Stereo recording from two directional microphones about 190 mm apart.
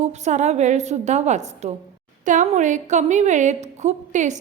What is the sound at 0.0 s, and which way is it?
Speech, 35° right (ahead or behind).